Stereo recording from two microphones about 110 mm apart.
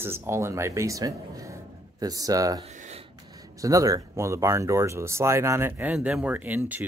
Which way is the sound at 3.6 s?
30° right (ahead or behind).